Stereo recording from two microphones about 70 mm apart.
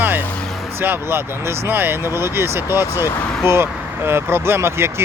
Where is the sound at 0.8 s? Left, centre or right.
Right.